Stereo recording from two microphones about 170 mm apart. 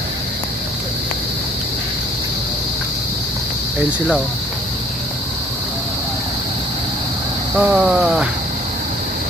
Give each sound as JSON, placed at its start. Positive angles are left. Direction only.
{"t": 7.5, "sound": "speech", "side_deg": -5}